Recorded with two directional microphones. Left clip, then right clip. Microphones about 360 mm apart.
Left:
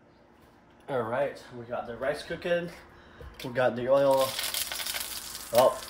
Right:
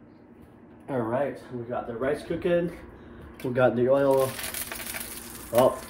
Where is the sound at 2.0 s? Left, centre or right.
Left.